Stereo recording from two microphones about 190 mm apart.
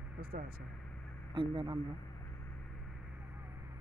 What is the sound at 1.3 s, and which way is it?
Speech, 25° right (ahead or behind).